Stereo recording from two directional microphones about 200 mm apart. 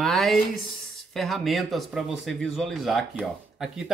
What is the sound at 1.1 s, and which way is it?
Speech, centre (ahead or behind).